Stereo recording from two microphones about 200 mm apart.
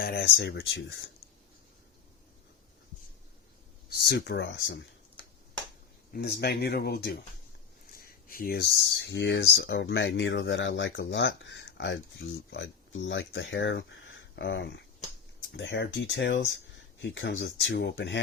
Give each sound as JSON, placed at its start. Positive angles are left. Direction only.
{"t": 0.0, "sound": "speech", "side_deg": 50}
{"t": 3.8, "sound": "speech", "side_deg": 55}
{"t": 6.1, "sound": "speech", "side_deg": 55}